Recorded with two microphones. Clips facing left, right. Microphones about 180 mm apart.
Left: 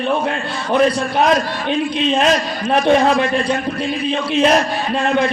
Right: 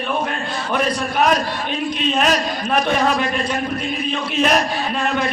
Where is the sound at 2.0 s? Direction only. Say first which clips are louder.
Left 2 dB; 30° left (ahead or behind).